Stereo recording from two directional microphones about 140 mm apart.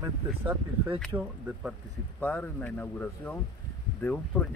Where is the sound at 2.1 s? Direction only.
10° left (ahead or behind).